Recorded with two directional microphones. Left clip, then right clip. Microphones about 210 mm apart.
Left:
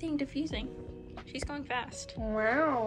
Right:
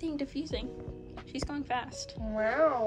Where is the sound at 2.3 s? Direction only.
35° left (ahead or behind).